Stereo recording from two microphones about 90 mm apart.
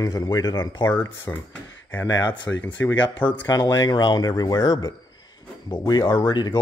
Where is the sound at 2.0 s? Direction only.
45° left (ahead or behind).